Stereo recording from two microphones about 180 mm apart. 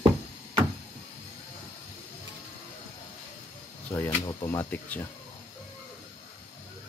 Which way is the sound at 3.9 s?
10° left (ahead or behind).